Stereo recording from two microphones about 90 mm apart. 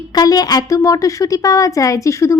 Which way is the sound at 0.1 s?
45° left (ahead or behind).